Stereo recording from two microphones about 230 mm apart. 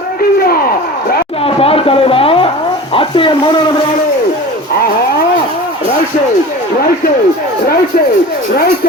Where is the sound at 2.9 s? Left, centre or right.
Left.